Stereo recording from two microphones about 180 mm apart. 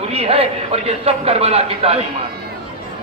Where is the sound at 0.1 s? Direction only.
35° right (ahead or behind).